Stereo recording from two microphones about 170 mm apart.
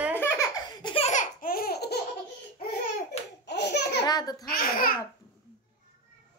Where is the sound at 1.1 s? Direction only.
50° left (ahead or behind).